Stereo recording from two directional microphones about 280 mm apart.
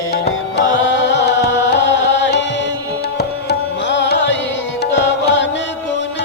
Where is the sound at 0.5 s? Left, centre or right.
Left.